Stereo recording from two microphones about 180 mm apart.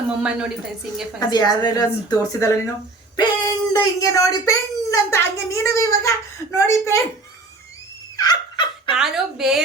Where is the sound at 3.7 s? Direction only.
20° left (ahead or behind).